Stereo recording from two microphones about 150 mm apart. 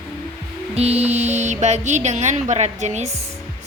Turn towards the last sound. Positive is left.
turn(degrees=-50)  # may be behind; listen again after turning